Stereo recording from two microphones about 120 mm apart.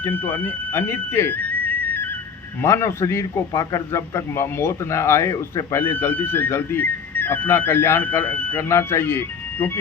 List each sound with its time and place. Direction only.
0.0 s a man's voice: 15° left (ahead or behind)